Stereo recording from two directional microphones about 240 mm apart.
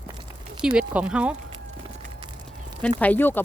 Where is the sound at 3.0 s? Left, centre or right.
Centre.